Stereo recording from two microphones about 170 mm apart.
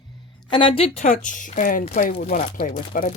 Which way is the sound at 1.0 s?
50° left (ahead or behind).